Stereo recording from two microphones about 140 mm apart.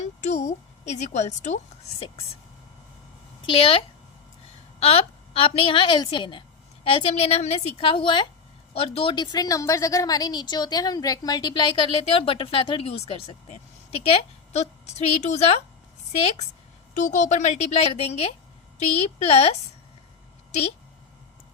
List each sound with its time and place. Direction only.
0.0 s a woman's voice: 55° left (ahead or behind)
2.0 s a woman's voice: 45° left (ahead or behind)
3.4 s a woman's voice: 40° left (ahead or behind)
16.9 s a woman's voice: 65° left (ahead or behind); by 19.5 s 45° left (ahead or behind)